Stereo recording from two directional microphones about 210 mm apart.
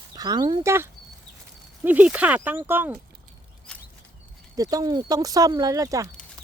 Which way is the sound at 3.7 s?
5° left (ahead or behind).